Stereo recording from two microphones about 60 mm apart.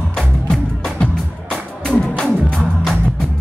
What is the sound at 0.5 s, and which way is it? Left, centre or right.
Music, centre.